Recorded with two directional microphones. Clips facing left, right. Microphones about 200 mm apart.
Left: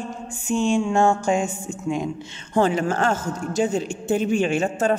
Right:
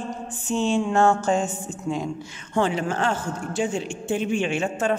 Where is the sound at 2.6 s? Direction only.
45° left (ahead or behind).